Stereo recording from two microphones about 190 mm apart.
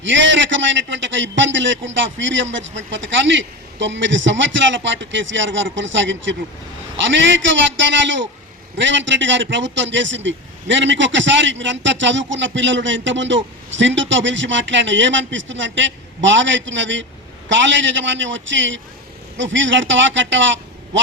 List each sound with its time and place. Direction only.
0.0 s a man's voice: 75° right (ahead or behind)